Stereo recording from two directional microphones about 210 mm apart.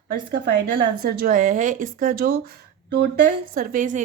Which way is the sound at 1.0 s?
45° right (ahead or behind).